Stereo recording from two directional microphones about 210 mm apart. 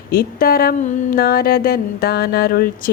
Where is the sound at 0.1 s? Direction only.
45° left (ahead or behind).